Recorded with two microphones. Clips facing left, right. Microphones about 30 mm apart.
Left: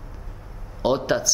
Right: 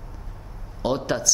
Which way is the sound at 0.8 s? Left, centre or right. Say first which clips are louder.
Left 3 dB; centre.